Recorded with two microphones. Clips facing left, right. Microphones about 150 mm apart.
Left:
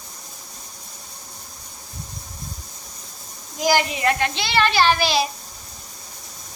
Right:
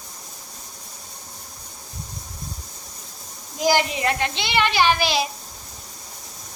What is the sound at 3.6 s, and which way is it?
A child's voice, 25° right (ahead or behind).